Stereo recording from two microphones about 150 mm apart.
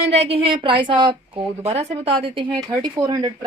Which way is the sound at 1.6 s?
45° right (ahead or behind).